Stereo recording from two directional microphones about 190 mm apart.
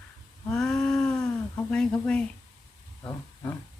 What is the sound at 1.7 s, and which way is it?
Speech, 5° left (ahead or behind).